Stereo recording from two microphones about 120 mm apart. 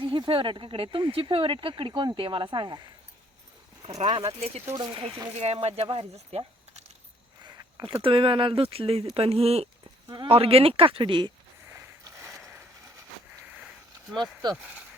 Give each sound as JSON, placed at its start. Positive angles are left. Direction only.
{"t": 0.0, "sound": "speech", "side_deg": -45}
{"t": 4.0, "sound": "speech", "side_deg": -50}
{"t": 4.7, "sound": "speech", "side_deg": -40}
{"t": 5.4, "sound": "speech", "side_deg": -60}
{"t": 5.8, "sound": "speech", "side_deg": -50}
{"t": 7.4, "sound": "a sound", "side_deg": -35}
{"t": 8.0, "sound": "speech", "side_deg": -50}
{"t": 11.7, "sound": "a sound", "side_deg": -25}